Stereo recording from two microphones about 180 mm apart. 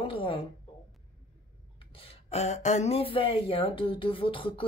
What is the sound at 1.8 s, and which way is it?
Speech, 30° left (ahead or behind).